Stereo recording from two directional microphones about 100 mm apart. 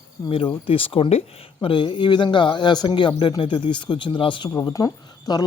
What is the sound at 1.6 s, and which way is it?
Speech, 55° left (ahead or behind).